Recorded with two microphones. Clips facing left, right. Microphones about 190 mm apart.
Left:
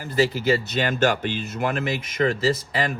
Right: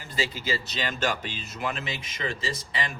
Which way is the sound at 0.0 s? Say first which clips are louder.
Left 10 dB; 55° left (ahead or behind).